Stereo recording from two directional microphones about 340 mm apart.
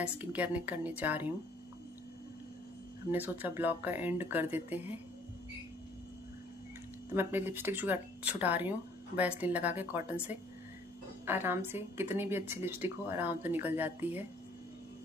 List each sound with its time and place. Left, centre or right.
0.0 s speech: centre
3.1 s speech: centre
7.2 s speech: centre
11.2 s a woman's voice: centre